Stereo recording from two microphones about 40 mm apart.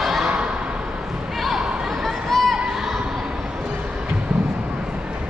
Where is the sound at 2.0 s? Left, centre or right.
Centre.